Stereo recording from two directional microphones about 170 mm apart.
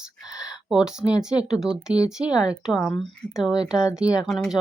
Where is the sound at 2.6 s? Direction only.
Centre (ahead or behind).